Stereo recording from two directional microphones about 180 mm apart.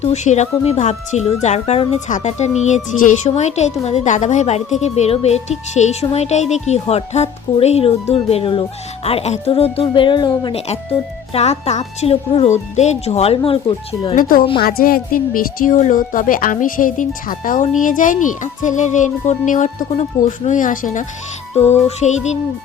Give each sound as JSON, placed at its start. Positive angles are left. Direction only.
{"t": 0.0, "sound": "speech", "side_deg": 40}
{"t": 11.3, "sound": "speech", "side_deg": 35}
{"t": 14.2, "sound": "speech", "side_deg": 50}
{"t": 21.5, "sound": "music", "side_deg": 35}
{"t": 21.8, "sound": "speech", "side_deg": 40}